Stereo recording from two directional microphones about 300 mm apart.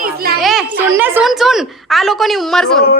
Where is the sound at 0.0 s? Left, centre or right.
Right.